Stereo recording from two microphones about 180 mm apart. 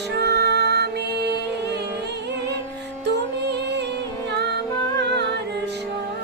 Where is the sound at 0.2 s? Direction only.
65° right (ahead or behind).